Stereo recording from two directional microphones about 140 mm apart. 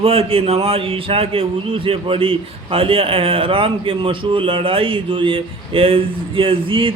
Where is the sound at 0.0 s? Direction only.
45° right (ahead or behind).